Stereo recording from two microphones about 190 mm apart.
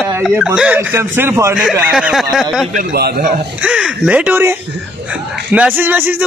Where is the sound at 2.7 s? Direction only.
55° right (ahead or behind).